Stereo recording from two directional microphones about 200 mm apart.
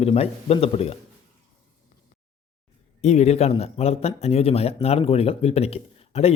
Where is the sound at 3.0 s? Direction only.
35° left (ahead or behind).